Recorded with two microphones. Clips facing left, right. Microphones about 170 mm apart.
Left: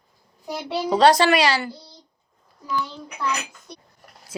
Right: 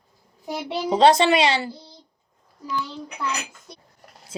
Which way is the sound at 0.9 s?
25° right (ahead or behind).